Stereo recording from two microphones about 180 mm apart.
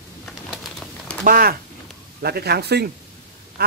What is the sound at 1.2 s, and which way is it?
Speech, 50° right (ahead or behind).